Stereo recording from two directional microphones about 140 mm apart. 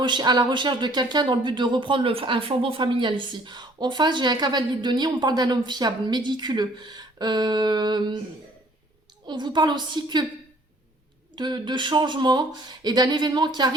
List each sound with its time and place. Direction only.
0.0 s speech: 30° right (ahead or behind)
9.2 s speech: 35° right (ahead or behind)
11.3 s speech: 35° right (ahead or behind)